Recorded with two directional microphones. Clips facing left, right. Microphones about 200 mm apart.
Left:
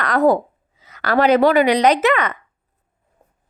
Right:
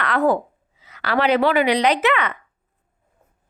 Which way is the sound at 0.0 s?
40° left (ahead or behind).